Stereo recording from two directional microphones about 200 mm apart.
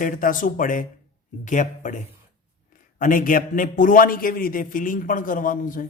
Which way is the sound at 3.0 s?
40° left (ahead or behind).